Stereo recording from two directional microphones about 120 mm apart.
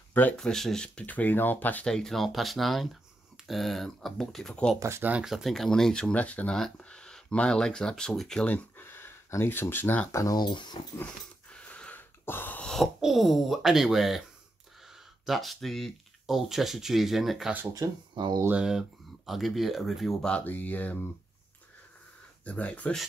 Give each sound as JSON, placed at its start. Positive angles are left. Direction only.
{"t": 0.1, "sound": "speech", "side_deg": 15}
{"t": 0.4, "sound": "speech", "side_deg": 5}
{"t": 4.7, "sound": "speech", "side_deg": -25}
{"t": 5.1, "sound": "speech", "side_deg": -5}
{"t": 8.7, "sound": "speech", "side_deg": 20}
{"t": 11.5, "sound": "a sound", "side_deg": 10}
{"t": 12.7, "sound": "speech", "side_deg": 0}
{"t": 17.7, "sound": "speech", "side_deg": -40}
{"t": 18.6, "sound": "speech", "side_deg": -5}
{"t": 22.4, "sound": "speech", "side_deg": 10}